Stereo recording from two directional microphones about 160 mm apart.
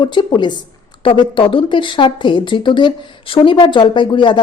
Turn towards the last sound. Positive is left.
turn(degrees=30)  # may be behind; listen again after turning